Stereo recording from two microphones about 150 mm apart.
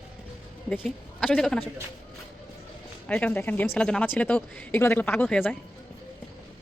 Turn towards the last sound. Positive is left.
turn(degrees=15)  # may be behind; listen again after turning